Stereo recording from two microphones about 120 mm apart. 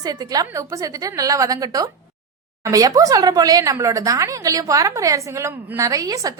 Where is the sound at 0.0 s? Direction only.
30° right (ahead or behind).